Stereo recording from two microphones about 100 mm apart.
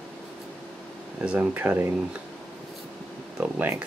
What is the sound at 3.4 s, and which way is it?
Speech, 20° right (ahead or behind).